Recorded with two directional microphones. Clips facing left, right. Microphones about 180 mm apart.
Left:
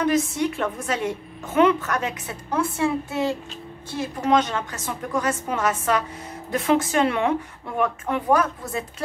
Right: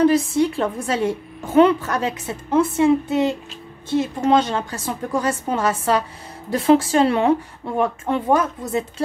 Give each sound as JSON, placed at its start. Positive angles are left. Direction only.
{"t": 0.0, "sound": "a woman's voice", "side_deg": -30}